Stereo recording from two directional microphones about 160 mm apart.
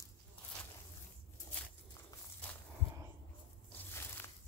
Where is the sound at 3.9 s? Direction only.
15° left (ahead or behind).